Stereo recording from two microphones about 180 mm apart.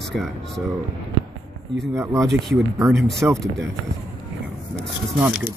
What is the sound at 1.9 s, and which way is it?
Speech, 15° right (ahead or behind).